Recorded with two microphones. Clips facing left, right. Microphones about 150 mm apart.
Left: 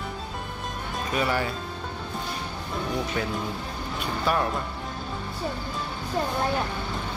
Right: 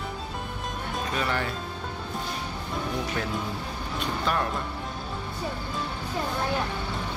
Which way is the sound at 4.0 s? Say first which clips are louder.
Left 2 dB; 5° left (ahead or behind).